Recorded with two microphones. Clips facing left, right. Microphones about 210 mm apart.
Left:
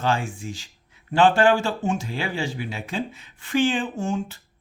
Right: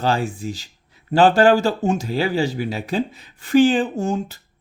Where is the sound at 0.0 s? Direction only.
35° right (ahead or behind).